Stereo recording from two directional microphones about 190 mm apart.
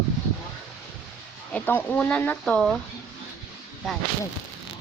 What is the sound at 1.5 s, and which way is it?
Speech, 10° left (ahead or behind).